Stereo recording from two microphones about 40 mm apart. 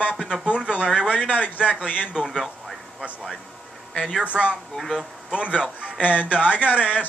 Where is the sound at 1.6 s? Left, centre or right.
Right.